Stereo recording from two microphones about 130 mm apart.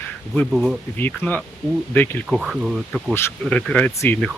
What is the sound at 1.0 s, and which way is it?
Speech, 15° left (ahead or behind).